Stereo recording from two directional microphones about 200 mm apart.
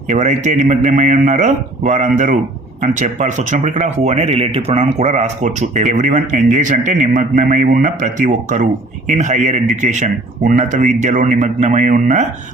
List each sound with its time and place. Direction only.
0.1 s speech: 35° right (ahead or behind)